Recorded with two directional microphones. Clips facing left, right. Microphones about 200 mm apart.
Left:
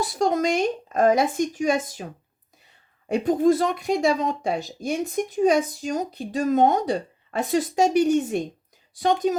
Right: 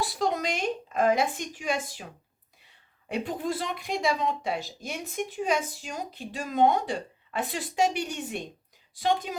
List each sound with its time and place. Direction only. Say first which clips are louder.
0.1 s speech: left 7 dB; 45° left (ahead or behind)
3.1 s speech: left 11 dB; 45° left (ahead or behind)